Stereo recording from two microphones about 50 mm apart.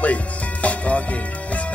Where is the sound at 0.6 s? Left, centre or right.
Left.